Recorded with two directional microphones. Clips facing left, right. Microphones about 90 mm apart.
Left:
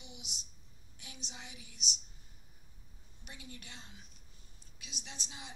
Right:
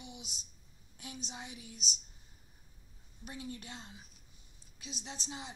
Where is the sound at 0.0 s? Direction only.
40° right (ahead or behind).